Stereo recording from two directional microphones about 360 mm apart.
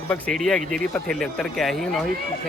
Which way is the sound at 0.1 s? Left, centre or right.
Centre.